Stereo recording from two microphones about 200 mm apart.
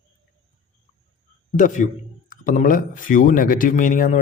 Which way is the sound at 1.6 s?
40° left (ahead or behind).